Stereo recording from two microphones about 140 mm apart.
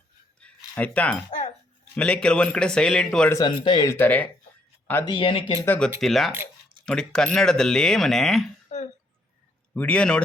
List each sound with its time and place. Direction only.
0.3 s keys jangling: 10° left (ahead or behind)
1.8 s a man's voice: 10° left (ahead or behind)
3.5 s speech: 40° left (ahead or behind)
3.8 s speech: 15° left (ahead or behind)
5.0 s speech: 35° left (ahead or behind)
5.6 s speech: 10° left (ahead or behind)
6.0 s a man's voice: centre (ahead or behind)
9.7 s speech: 10° left (ahead or behind)